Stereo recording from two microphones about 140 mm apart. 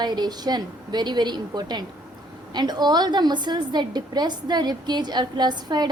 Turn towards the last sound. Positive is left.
turn(degrees=-30)  # may be behind; listen again after turning